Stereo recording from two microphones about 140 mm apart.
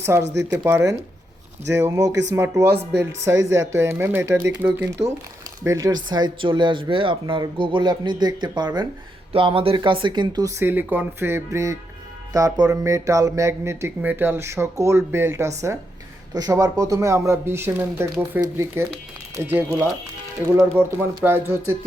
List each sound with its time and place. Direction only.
0.0 s speech: 20° right (ahead or behind)
10.6 s speech: 15° right (ahead or behind)